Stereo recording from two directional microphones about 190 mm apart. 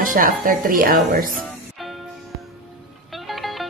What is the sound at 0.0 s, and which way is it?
Speech, 45° right (ahead or behind).